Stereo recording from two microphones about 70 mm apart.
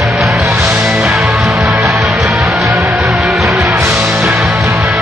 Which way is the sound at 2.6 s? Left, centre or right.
Right.